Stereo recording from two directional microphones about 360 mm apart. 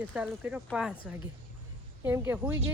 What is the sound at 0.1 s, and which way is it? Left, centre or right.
Speech, centre.